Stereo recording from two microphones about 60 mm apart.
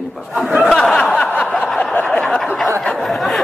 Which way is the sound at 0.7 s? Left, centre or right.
Centre.